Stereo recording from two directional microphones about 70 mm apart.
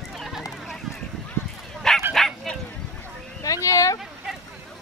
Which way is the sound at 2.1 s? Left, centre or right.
Centre.